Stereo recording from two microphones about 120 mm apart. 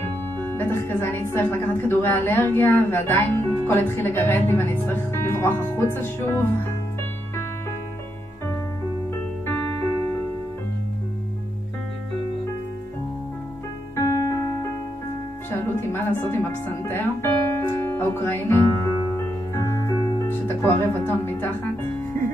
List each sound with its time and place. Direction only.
0.4 s speech: 15° left (ahead or behind)
13.9 s piano: 25° left (ahead or behind)
15.5 s music: 20° left (ahead or behind)